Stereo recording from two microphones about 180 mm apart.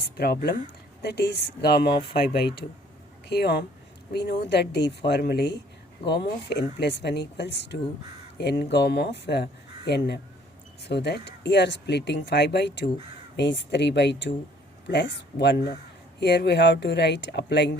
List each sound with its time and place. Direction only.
0.2 s speech: 60° left (ahead or behind)